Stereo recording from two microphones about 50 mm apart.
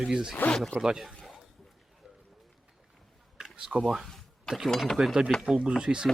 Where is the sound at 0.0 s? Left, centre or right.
Centre.